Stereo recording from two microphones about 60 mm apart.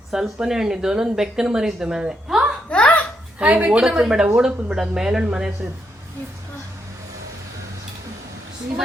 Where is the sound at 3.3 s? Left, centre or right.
Right.